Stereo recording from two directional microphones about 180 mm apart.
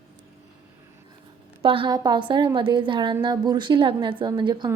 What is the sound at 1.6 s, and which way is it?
A woman's voice, 30° right (ahead or behind).